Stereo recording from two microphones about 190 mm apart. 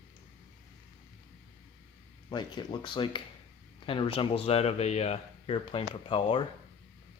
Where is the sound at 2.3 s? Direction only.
25° left (ahead or behind).